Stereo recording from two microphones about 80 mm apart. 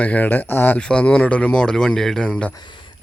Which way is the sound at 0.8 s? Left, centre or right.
Centre.